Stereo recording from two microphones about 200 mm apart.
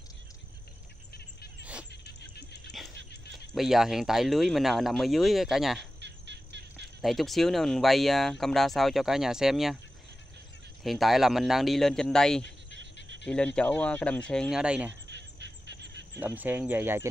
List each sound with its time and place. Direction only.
1.6 s music: 5° right (ahead or behind)
1.9 s music: 55° left (ahead or behind)
3.5 s speech: centre (ahead or behind)
5.9 s bird: 60° right (ahead or behind)
7.0 s speech: centre (ahead or behind)
10.8 s speech: centre (ahead or behind)
15.0 s music: 60° right (ahead or behind)
16.2 s speech: 10° right (ahead or behind)